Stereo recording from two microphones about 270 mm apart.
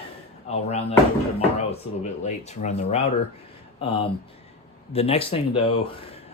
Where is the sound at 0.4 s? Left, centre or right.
Left.